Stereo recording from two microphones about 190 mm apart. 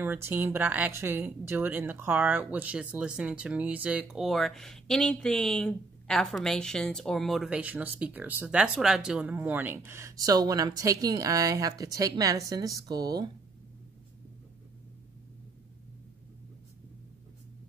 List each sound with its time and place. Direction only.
0.0 s a woman's voice: 10° right (ahead or behind)